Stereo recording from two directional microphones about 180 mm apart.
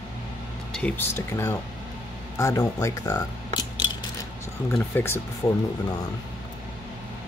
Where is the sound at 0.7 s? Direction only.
10° left (ahead or behind).